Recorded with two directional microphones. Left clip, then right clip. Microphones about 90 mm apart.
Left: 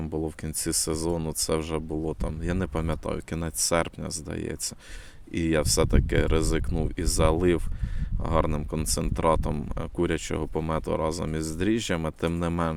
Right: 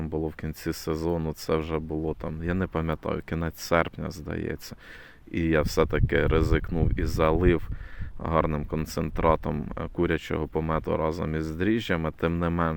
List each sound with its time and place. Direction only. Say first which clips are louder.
0.0 s speech: even; 25° left (ahead or behind)